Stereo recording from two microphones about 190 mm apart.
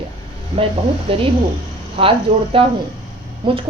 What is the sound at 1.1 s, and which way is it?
A woman's voice, 30° right (ahead or behind).